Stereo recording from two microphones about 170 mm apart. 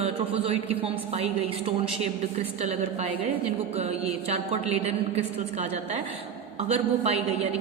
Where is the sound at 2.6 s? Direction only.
40° right (ahead or behind).